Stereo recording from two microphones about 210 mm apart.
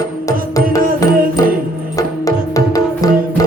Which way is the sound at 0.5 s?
15° left (ahead or behind).